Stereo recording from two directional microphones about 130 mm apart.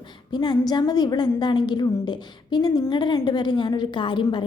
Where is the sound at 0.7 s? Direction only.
30° left (ahead or behind).